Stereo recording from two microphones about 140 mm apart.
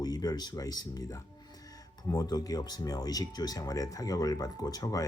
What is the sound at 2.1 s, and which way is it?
Speech, 25° left (ahead or behind).